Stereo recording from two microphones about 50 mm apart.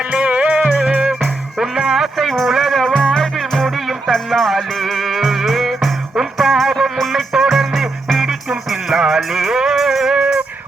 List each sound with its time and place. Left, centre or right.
0.1 s music: right
2.1 s music: centre
2.9 s music: centre